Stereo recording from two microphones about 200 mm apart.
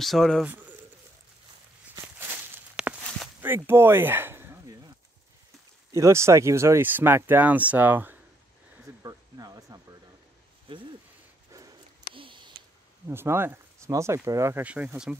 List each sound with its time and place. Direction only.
0.0 s speech: centre (ahead or behind)
0.5 s bird: 10° right (ahead or behind)
2.1 s walk: 10° right (ahead or behind)
3.4 s speech: 10° right (ahead or behind)
5.9 s speech: 15° right (ahead or behind)
9.0 s a sound: 20° right (ahead or behind)
10.7 s speech: 25° right (ahead or behind)
11.5 s a sound: 20° right (ahead or behind)
13.1 s speech: 10° right (ahead or behind)